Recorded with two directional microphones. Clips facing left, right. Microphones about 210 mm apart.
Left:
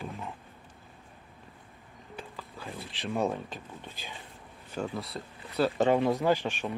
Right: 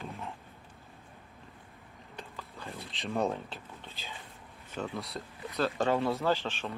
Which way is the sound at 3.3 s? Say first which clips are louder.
Left 2 dB; 15° left (ahead or behind).